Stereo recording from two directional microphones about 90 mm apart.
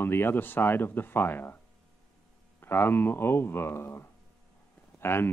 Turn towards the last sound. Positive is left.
turn(degrees=25)  # may be behind; listen again after turning